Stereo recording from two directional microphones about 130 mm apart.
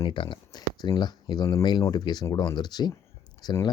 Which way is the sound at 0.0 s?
40° left (ahead or behind).